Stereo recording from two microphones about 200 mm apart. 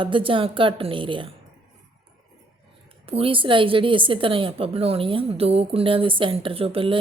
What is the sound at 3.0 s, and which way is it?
A woman's voice, 30° right (ahead or behind).